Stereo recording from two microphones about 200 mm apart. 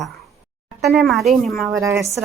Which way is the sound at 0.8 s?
Centre (ahead or behind).